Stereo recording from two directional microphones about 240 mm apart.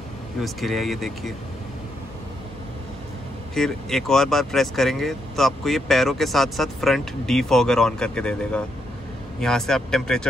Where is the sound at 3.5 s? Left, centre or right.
Centre.